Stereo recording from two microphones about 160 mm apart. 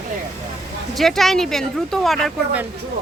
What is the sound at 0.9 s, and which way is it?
Speech, centre (ahead or behind).